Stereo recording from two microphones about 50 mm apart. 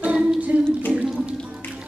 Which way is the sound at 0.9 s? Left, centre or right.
Right.